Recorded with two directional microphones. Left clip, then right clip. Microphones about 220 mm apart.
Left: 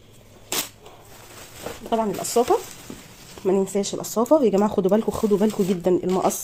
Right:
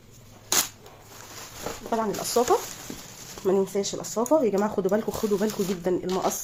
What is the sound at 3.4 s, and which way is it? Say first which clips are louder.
Speech: left 2 dB; 35° left (ahead or behind).